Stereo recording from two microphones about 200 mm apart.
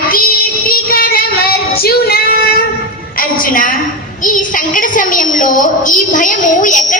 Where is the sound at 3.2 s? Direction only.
40° left (ahead or behind).